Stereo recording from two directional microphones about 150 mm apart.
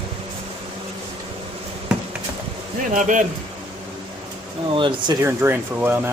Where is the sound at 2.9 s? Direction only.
60° right (ahead or behind).